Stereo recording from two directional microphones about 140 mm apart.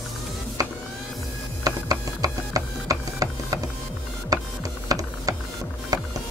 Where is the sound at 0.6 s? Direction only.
25° right (ahead or behind).